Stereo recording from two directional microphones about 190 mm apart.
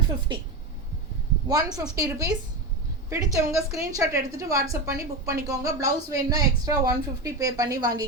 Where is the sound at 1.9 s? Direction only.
20° right (ahead or behind).